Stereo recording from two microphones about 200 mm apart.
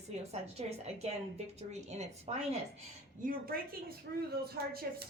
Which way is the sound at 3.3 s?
45° right (ahead or behind).